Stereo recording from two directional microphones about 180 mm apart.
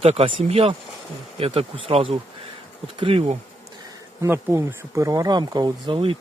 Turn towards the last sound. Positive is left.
turn(degrees=-30)  # may be behind; listen again after turning